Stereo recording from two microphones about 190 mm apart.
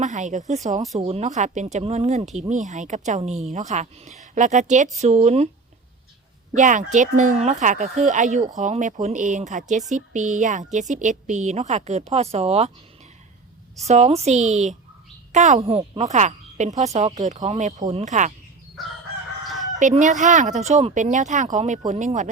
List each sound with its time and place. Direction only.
0.0 s speech: 40° right (ahead or behind)
6.5 s speech: 40° right (ahead or behind)
13.8 s a woman's voice: 35° right (ahead or behind)
19.8 s speech: 40° right (ahead or behind)